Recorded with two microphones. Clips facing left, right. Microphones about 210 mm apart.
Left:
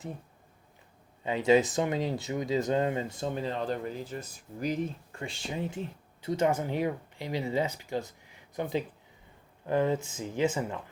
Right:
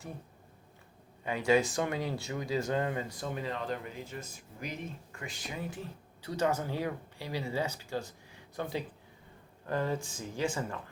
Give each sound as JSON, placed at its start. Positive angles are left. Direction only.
{"t": 1.2, "sound": "speech", "side_deg": 20}